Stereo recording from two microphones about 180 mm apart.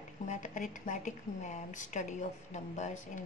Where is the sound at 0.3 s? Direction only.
45° left (ahead or behind).